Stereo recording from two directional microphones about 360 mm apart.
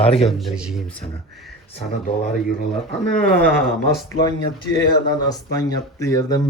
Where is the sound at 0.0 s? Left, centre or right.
Centre.